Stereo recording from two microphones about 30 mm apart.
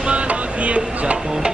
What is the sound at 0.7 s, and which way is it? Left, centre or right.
Speech, right.